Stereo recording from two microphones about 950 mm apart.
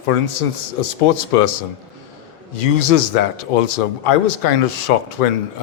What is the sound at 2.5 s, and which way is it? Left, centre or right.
A man's voice, left.